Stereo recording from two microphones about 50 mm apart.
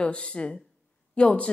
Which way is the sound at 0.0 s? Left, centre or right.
Left.